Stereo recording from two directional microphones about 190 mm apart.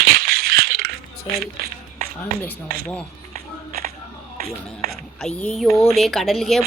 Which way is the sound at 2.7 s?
50° right (ahead or behind).